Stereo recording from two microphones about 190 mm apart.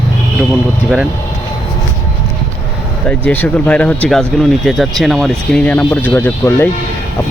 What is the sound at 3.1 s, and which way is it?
Speech, 5° left (ahead or behind).